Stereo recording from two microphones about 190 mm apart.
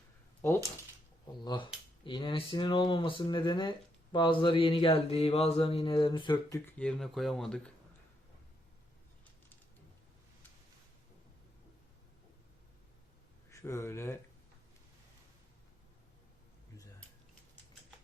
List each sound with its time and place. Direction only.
1.5 s speech: 25° left (ahead or behind)
6.7 s speech: 5° left (ahead or behind)
13.5 s speech: 15° left (ahead or behind)